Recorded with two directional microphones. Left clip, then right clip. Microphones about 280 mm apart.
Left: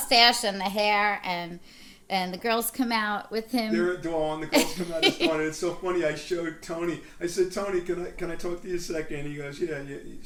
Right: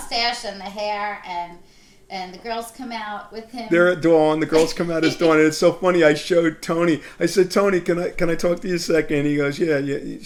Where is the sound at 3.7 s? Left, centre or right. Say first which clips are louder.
Right 15 dB; right.